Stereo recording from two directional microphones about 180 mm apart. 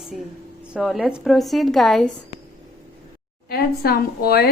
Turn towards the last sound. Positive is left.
turn(degrees=60)  # may be behind; listen again after turning